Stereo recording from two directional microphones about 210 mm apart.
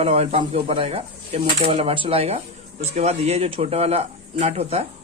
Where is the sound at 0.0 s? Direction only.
30° right (ahead or behind).